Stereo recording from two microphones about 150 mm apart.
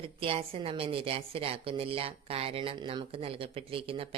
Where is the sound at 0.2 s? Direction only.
40° right (ahead or behind).